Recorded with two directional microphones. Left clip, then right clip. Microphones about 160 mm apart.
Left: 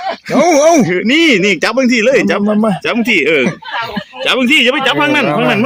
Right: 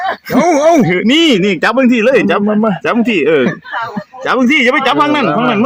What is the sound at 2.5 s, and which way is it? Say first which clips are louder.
Speech: even; 20° left (ahead or behind).